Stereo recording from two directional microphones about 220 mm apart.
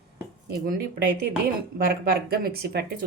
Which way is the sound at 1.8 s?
40° right (ahead or behind).